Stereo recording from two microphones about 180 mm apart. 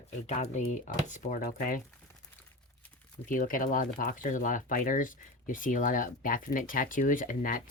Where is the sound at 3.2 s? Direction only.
50° left (ahead or behind).